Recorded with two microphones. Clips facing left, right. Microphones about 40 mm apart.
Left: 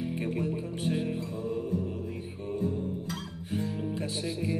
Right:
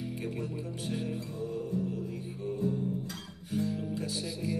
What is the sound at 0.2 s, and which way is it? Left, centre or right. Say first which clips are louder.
Music: left 6 dB; left.